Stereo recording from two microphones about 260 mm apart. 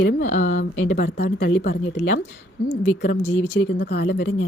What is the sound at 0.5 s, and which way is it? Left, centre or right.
Speech, left.